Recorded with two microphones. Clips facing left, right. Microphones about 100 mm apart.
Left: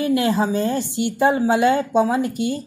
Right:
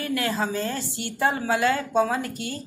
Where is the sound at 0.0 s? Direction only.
20° left (ahead or behind).